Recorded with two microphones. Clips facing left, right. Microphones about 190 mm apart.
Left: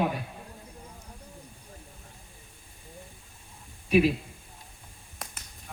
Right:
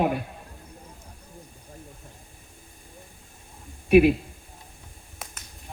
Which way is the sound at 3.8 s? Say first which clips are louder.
Right 6 dB; 60° right (ahead or behind).